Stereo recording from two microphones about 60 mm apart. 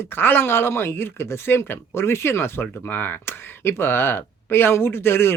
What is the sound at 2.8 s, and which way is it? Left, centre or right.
Speech, left.